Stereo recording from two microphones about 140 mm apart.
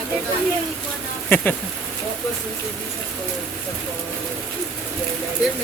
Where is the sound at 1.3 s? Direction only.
15° left (ahead or behind).